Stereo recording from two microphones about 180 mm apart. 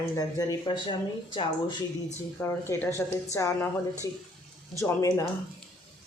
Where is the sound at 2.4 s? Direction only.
15° left (ahead or behind).